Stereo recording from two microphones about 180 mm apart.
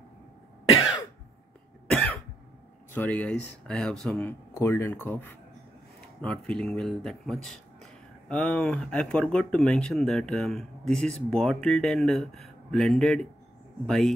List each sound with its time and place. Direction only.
1.9 s cough: 5° left (ahead or behind)
2.9 s speech: 10° left (ahead or behind)